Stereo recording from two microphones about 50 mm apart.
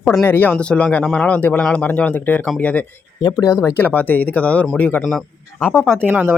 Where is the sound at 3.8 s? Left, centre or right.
Left.